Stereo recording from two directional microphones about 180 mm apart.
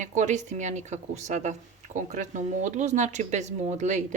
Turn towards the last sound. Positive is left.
turn(degrees=-40)  # may be behind; listen again after turning